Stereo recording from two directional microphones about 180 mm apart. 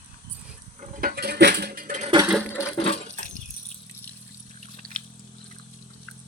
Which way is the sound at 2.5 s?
15° left (ahead or behind).